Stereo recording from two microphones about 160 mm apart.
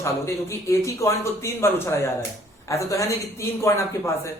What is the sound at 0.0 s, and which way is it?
A man's voice, 20° left (ahead or behind).